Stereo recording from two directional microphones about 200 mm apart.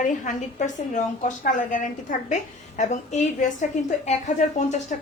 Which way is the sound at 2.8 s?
35° left (ahead or behind).